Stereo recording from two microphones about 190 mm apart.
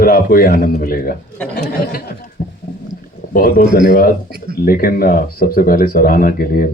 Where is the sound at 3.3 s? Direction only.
50° left (ahead or behind).